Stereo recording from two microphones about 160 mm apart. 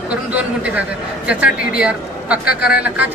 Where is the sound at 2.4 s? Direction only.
80° left.